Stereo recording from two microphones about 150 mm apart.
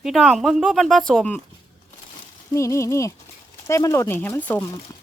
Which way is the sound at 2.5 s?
20° left (ahead or behind).